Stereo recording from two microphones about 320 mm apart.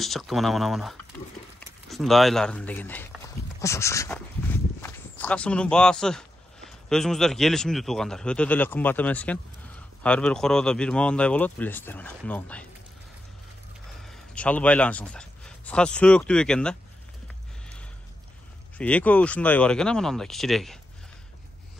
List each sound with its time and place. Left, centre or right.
0.0 s speech: centre
14.0 s speech: centre
18.8 s speech: centre